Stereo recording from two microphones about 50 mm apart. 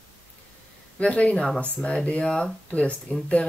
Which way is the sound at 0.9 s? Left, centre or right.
Left.